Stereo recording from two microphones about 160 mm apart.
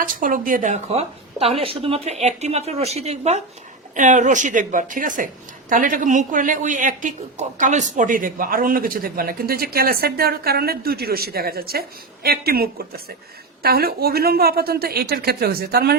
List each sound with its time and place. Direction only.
0.2 s a woman's voice: 55° right (ahead or behind); by 16.0 s 80° right